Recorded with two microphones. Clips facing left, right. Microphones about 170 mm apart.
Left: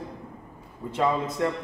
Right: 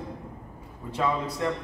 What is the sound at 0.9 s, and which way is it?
Speech, 20° left (ahead or behind).